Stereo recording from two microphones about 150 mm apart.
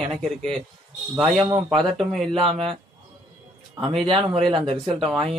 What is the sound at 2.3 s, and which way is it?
Speech, 40° right (ahead or behind).